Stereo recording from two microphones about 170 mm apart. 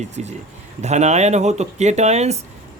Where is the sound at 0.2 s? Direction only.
45° right (ahead or behind).